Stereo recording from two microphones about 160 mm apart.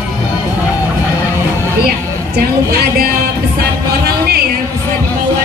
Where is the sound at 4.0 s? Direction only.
75° right (ahead or behind).